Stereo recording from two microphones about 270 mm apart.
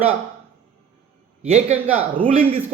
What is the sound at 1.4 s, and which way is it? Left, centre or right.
Speech, right.